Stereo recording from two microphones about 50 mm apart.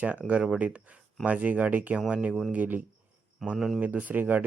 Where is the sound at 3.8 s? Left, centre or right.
Right.